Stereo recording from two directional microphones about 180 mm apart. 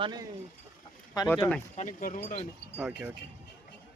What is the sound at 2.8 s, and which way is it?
Speech, 10° right (ahead or behind).